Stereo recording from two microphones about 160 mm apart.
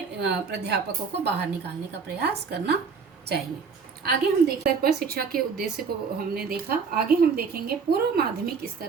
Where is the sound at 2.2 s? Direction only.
90° right.